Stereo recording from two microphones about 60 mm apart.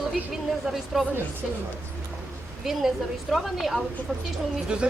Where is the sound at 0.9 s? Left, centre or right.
Centre.